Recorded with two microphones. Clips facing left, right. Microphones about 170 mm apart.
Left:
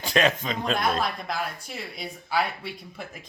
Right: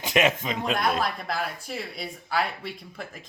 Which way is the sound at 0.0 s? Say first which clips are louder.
Even; 20° right (ahead or behind).